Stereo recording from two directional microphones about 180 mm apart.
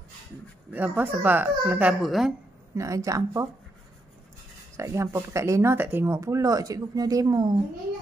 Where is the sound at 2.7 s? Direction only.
15° right (ahead or behind).